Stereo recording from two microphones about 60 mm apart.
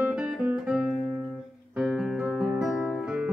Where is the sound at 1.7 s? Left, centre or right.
Centre.